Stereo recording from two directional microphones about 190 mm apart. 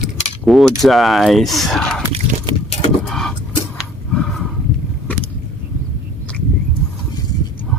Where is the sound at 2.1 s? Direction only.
25° right (ahead or behind).